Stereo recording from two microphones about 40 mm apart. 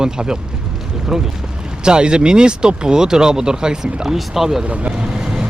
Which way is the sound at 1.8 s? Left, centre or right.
Right.